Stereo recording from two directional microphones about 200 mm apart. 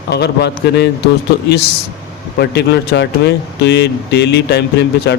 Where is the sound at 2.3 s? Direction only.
55° left (ahead or behind).